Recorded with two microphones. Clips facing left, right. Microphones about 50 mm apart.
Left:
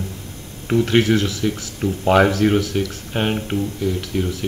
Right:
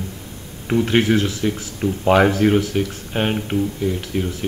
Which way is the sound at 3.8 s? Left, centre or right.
Centre.